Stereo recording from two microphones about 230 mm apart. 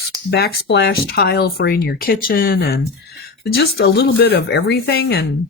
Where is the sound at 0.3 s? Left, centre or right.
Left.